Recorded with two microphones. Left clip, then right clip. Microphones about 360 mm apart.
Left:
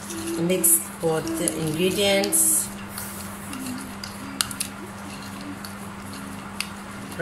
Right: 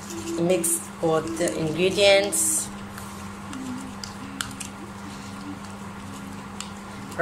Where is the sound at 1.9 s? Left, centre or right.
Right.